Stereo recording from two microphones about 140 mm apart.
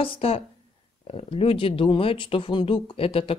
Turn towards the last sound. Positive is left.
turn(degrees=40)  # may be behind; listen again after turning